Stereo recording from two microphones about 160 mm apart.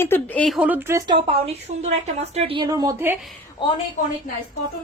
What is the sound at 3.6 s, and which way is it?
Speech, 30° left (ahead or behind).